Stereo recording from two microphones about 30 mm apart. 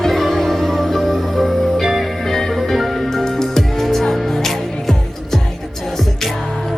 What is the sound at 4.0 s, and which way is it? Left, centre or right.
Music, centre.